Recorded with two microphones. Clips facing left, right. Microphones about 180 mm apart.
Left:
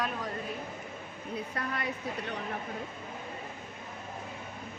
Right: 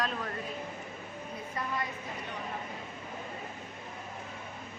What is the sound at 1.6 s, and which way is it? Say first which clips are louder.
Speech: right 1 dB; 70° left (ahead or behind).